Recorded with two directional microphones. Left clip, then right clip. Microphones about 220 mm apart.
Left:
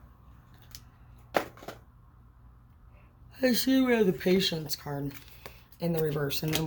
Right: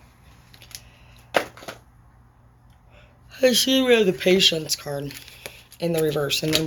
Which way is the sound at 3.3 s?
20° left (ahead or behind).